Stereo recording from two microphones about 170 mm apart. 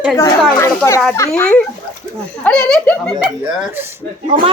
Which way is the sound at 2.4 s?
5° left (ahead or behind).